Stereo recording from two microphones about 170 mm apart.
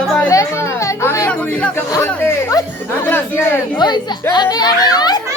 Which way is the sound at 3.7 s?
25° left (ahead or behind).